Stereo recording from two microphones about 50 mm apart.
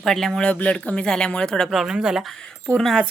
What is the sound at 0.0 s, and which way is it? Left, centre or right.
Speech, centre.